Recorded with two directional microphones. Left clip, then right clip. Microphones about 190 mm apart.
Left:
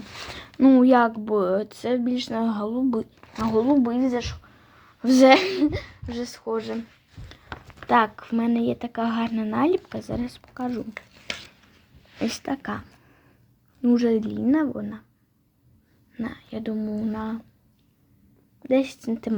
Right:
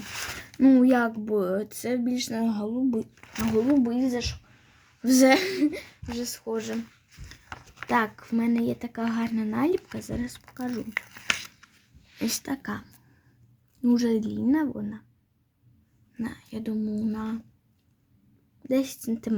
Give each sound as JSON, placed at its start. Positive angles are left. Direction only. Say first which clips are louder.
{"t": 0.6, "sound": "speech", "louder": "left 4 dB", "side_deg": -20}
{"t": 3.2, "sound": "speech", "louder": "left 3 dB", "side_deg": 0}
{"t": 3.8, "sound": "speech", "louder": "left 3 dB", "side_deg": -15}
{"t": 7.9, "sound": "speech", "louder": "left 6 dB", "side_deg": -15}
{"t": 12.2, "sound": "speech", "louder": "left 3 dB", "side_deg": -20}
{"t": 16.1, "sound": "speech", "louder": "left 3 dB", "side_deg": -20}
{"t": 18.6, "sound": "speech", "louder": "left 5 dB", "side_deg": -15}